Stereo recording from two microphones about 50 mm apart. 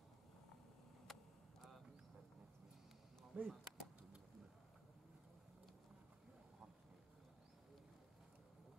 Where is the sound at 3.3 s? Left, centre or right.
Right.